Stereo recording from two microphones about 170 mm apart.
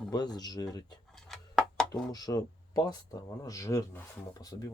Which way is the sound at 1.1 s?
Centre (ahead or behind).